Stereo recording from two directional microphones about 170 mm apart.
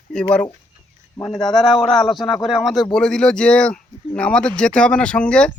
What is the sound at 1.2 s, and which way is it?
Speech, centre (ahead or behind).